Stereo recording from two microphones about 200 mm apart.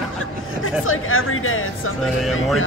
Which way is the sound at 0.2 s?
90° left.